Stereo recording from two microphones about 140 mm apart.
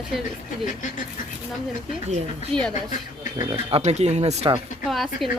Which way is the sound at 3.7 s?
50° right (ahead or behind).